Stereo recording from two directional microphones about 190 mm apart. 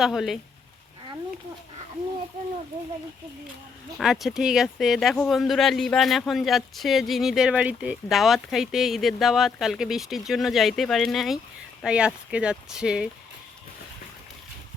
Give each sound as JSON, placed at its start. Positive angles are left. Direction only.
{"t": 0.0, "sound": "speech", "side_deg": 0}
{"t": 3.9, "sound": "speech", "side_deg": 0}